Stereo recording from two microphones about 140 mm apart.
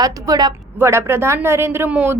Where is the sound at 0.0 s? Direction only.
30° right (ahead or behind).